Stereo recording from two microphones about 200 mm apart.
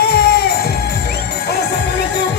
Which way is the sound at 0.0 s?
55° left (ahead or behind).